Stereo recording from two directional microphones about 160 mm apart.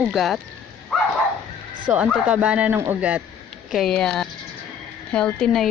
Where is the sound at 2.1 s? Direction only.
5° right (ahead or behind).